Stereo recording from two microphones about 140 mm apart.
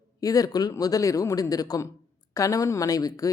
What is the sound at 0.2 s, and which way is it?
Speech, 25° left (ahead or behind).